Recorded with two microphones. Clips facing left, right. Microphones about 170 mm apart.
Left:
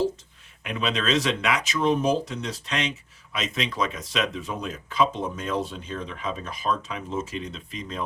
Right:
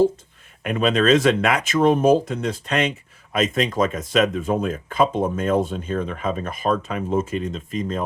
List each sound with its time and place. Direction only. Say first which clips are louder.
0.6 s speech: right 8 dB; 50° right (ahead or behind)